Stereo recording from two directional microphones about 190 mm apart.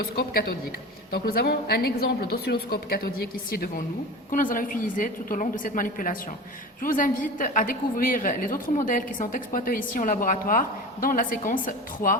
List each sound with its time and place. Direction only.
0.0 s a woman's voice: 55° left (ahead or behind)